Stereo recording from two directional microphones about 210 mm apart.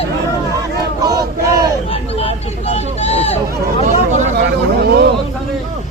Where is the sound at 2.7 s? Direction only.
30° left (ahead or behind).